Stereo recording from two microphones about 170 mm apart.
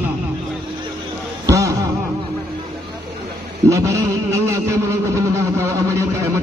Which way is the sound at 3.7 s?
15° right (ahead or behind).